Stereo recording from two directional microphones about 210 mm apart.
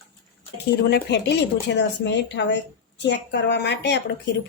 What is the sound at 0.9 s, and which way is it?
A woman's voice, 55° left (ahead or behind).